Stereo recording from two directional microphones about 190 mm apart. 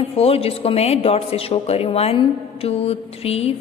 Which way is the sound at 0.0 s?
30° left (ahead or behind).